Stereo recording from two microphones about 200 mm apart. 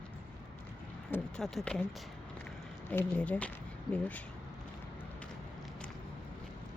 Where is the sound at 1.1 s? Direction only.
5° left (ahead or behind).